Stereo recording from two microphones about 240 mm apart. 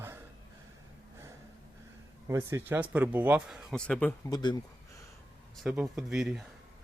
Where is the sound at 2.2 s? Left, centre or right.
Centre.